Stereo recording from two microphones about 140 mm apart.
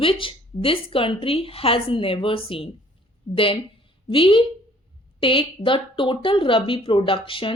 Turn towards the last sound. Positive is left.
turn(degrees=40)  # may be behind; listen again after turning